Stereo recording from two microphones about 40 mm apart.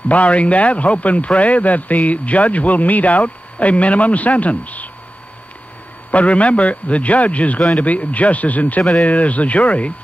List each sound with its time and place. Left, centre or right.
0.1 s speech: left
6.1 s speech: left